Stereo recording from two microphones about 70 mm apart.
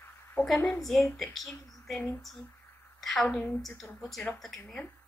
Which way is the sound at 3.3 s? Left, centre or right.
Left.